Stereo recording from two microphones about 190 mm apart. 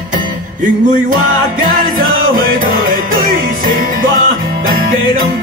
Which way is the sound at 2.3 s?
45° right (ahead or behind).